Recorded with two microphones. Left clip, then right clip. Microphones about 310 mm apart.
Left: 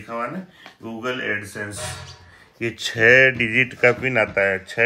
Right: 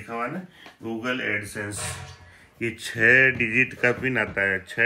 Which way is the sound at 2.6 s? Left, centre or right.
Left.